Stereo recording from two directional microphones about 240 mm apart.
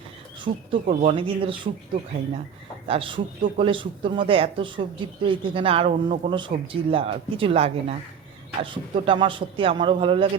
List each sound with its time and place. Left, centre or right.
0.4 s speech: right
2.8 s speech: right